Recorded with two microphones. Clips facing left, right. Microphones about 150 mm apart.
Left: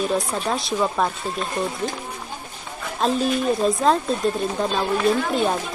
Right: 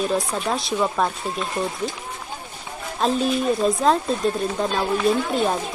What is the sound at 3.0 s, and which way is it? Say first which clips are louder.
A woman's voice: even; centre (ahead or behind).